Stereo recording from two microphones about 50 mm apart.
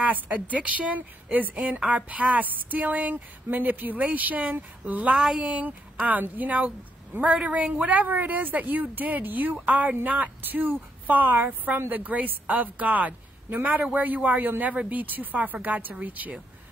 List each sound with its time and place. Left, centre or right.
0.0 s speech: right
1.8 s speech: right
5.2 s speech: centre
6.0 s speech: right
7.1 s a woman's voice: right
7.4 s speech: right